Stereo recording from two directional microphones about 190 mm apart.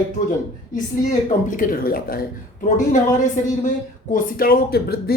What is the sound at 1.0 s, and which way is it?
Speech, 45° left (ahead or behind).